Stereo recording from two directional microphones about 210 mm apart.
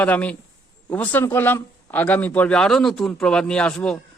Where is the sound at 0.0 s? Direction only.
5° left (ahead or behind).